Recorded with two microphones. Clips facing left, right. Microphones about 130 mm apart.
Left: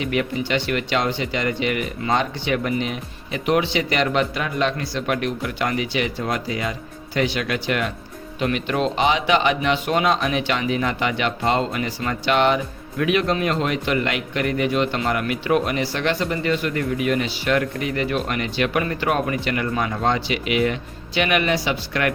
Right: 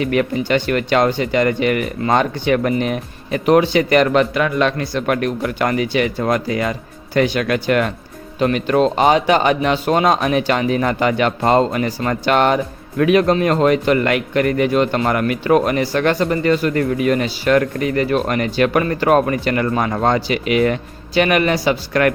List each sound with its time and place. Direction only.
0.0 s a man's voice: 45° right (ahead or behind)
4.4 s a man's voice: 65° right (ahead or behind); by 22.1 s 45° right (ahead or behind)